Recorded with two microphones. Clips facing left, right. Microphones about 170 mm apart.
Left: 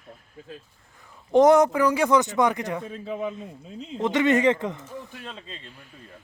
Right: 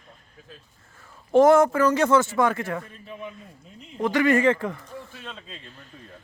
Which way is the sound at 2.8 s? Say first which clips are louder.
Left 8 dB; 90° left.